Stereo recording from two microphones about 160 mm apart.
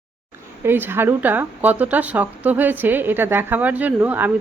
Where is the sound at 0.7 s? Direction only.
15° right (ahead or behind).